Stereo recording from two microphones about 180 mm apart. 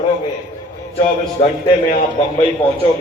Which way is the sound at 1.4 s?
35° left (ahead or behind).